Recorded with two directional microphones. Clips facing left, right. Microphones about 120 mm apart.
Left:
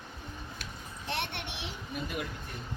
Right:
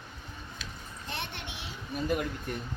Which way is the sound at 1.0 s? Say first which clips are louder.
Left 3 dB; 70° left (ahead or behind).